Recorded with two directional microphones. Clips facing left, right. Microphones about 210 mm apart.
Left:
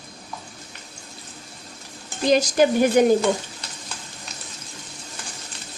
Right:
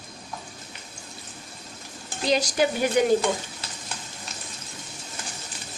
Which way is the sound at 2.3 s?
45° left (ahead or behind).